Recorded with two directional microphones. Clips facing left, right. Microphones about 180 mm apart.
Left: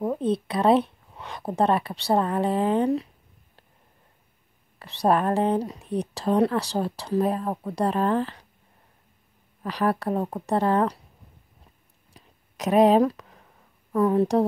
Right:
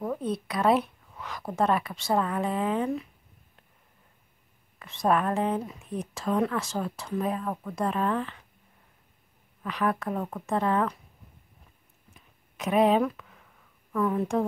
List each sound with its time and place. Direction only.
0.0 s speech: 25° left (ahead or behind)
4.7 s speech: 35° left (ahead or behind)
9.6 s speech: 35° left (ahead or behind)
12.1 s a sound: 40° left (ahead or behind)